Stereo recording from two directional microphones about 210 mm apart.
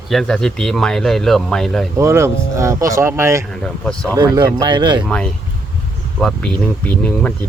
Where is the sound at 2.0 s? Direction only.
15° right (ahead or behind).